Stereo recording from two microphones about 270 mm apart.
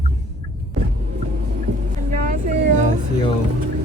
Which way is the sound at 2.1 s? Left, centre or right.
Right.